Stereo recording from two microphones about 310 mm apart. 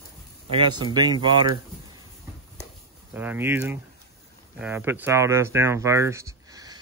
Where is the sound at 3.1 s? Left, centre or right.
Centre.